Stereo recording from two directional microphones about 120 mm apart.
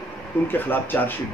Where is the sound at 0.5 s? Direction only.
15° left (ahead or behind).